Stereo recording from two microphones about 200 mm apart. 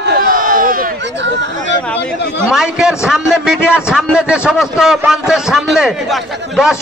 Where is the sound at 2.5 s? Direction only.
5° right (ahead or behind).